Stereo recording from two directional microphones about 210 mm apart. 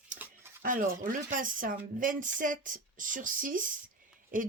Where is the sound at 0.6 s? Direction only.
40° right (ahead or behind).